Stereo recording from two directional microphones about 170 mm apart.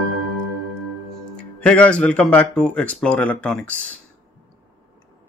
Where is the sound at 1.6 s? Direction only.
5° left (ahead or behind).